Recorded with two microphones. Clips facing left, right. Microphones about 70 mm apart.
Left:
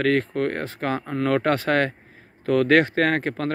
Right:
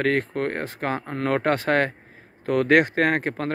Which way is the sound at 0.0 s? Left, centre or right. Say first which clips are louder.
Left 2 dB; right.